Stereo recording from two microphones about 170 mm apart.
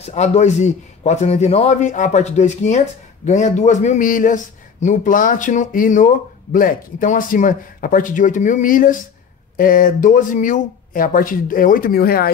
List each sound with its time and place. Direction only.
0.0 s a man's voice: 40° left (ahead or behind); by 12.3 s 60° left (ahead or behind)